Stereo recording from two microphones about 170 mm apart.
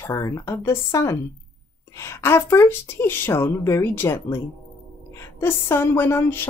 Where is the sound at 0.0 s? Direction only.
20° left (ahead or behind).